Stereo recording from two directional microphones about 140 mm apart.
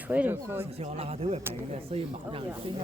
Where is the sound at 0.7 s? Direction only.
45° right (ahead or behind).